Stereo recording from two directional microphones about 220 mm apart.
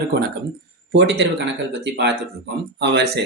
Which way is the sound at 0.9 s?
50° right (ahead or behind).